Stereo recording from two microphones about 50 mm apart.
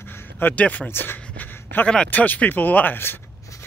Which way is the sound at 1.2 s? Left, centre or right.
Left.